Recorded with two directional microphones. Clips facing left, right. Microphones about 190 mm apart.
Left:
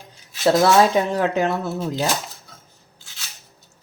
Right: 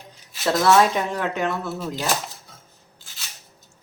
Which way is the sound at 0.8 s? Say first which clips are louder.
Left 3 dB; 30° left (ahead or behind).